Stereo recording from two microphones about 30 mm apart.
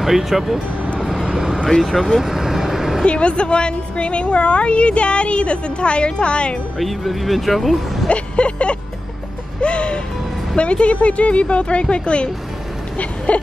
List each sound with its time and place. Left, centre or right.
0.0 s speech: centre
0.9 s vehicle: centre
1.3 s vehicle: centre
1.8 s speech: centre
2.2 s vehicle: centre
3.1 s a woman's voice: left
6.8 s speech: centre
8.1 s vehicle: left
9.6 s music: left
10.5 s a woman's voice: left
13.3 s speech: left